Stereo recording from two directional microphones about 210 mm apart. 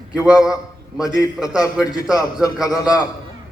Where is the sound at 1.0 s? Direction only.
15° left (ahead or behind).